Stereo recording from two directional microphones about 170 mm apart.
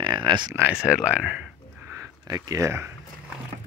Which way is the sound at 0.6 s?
10° right (ahead or behind).